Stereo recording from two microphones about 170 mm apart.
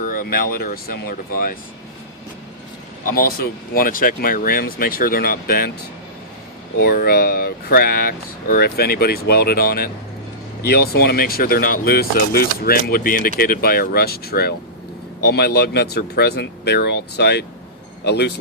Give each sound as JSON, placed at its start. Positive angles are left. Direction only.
{"t": 0.0, "sound": "speech", "side_deg": 55}
{"t": 3.8, "sound": "speech", "side_deg": 55}
{"t": 6.7, "sound": "speech", "side_deg": 65}